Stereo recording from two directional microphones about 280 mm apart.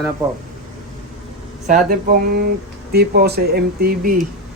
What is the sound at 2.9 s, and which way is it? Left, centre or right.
Speech, right.